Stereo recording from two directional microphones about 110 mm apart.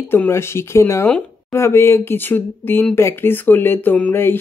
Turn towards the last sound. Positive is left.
turn(degrees=20)  # may be behind; listen again after turning